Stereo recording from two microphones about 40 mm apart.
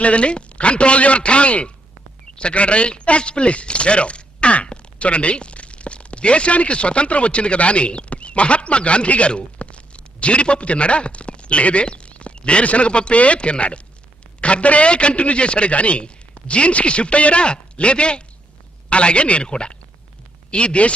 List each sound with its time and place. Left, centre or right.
0.0 s a man's voice: left